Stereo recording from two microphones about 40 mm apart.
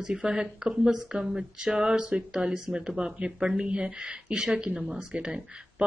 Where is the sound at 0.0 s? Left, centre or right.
Centre.